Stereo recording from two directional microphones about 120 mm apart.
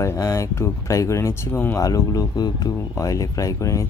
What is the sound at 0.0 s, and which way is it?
Speech, 25° left (ahead or behind).